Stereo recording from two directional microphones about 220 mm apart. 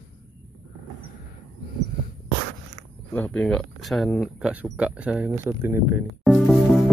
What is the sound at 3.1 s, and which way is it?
Speech, 5° left (ahead or behind).